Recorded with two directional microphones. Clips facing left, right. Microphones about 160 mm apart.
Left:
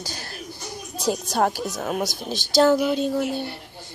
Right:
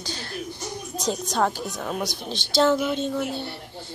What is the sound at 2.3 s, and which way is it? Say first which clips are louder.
Speech: left 3 dB; 45° left (ahead or behind).